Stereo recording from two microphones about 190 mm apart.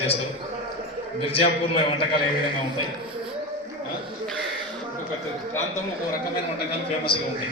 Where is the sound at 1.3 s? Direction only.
30° left (ahead or behind).